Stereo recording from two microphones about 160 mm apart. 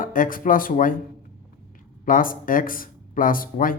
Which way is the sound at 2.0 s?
60° left (ahead or behind).